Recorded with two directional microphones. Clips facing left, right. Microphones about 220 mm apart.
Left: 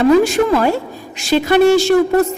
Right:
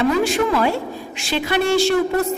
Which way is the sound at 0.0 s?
45° left (ahead or behind).